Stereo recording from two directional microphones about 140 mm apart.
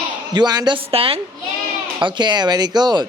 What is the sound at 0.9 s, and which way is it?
A woman's voice, 45° right (ahead or behind).